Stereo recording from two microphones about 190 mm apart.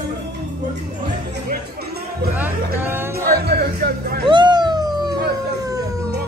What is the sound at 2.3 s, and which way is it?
Music, 10° right (ahead or behind).